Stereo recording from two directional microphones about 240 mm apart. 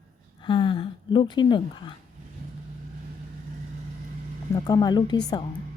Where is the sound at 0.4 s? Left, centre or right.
Centre.